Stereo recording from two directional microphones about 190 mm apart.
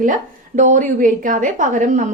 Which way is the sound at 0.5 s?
40° right (ahead or behind).